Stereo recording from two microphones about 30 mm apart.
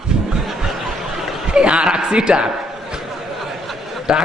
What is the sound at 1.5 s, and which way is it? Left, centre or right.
Speech, right.